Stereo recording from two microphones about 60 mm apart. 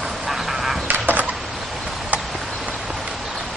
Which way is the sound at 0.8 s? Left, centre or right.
Right.